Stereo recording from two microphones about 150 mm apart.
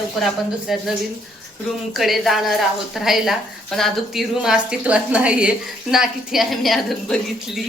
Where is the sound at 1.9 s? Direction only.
Centre (ahead or behind).